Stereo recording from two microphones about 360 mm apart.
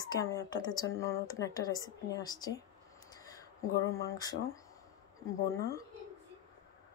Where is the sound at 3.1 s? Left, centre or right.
Centre.